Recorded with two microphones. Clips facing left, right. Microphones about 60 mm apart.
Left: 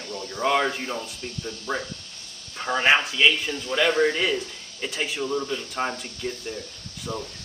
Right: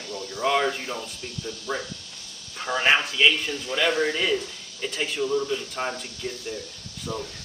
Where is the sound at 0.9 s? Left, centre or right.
Left.